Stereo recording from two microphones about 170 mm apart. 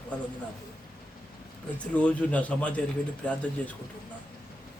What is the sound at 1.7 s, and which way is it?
Speech, 10° left (ahead or behind).